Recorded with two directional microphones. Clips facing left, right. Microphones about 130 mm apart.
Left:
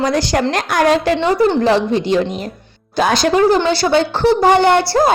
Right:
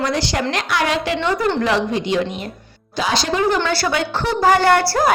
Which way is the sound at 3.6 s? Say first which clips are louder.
Left 6 dB; 20° left (ahead or behind).